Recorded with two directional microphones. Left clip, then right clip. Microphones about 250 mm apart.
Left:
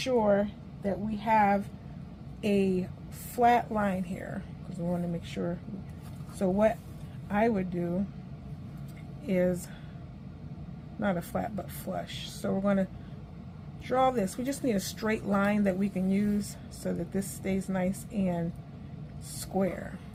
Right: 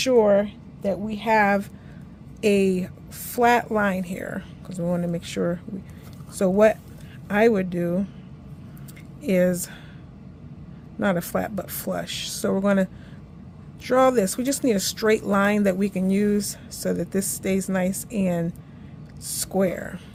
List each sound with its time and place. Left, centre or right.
0.0 s speech: right
9.2 s speech: right
11.0 s speech: right